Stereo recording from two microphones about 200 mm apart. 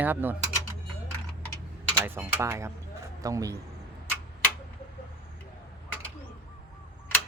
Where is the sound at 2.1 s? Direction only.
10° right (ahead or behind).